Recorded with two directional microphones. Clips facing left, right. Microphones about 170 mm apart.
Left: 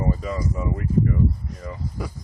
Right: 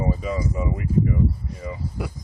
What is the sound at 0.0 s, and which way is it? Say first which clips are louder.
Speech: right 1 dB; 5° right (ahead or behind).